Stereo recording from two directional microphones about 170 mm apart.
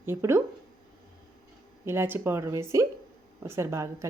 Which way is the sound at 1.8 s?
15° right (ahead or behind).